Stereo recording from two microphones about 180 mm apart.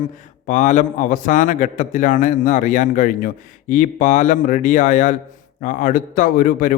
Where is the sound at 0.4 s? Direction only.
45° left (ahead or behind).